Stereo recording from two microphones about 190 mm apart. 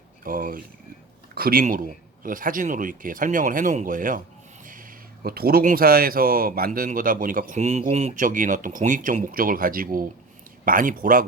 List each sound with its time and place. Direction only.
0.3 s speech: 45° right (ahead or behind)